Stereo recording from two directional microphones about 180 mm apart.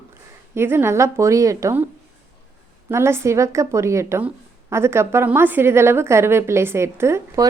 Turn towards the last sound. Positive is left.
turn(degrees=-15)  # may be behind; listen again after turning